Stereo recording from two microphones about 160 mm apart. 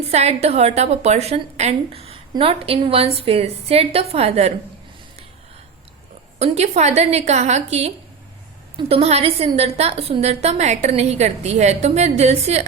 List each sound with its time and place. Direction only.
0.1 s a woman's voice: 40° right (ahead or behind)
6.4 s a woman's voice: 45° right (ahead or behind)